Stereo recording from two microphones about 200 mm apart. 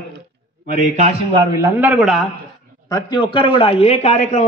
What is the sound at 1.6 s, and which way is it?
Speech, 5° right (ahead or behind).